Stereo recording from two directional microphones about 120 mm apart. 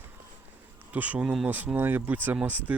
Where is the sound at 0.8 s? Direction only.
15° right (ahead or behind).